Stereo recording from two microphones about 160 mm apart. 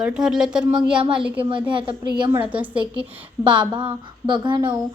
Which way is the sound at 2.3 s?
10° right (ahead or behind).